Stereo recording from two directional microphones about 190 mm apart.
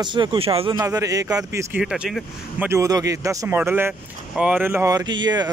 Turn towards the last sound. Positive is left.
turn(degrees=-20)  # may be behind; listen again after turning